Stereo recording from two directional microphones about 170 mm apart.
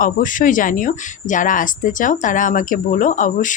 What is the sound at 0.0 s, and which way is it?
Speech, 50° left (ahead or behind).